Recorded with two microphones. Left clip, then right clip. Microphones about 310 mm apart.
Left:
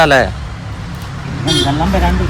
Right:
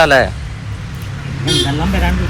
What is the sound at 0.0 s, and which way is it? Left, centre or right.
Speech, centre.